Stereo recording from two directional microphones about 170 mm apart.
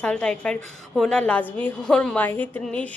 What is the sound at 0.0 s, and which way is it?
A woman's voice, 5° left (ahead or behind).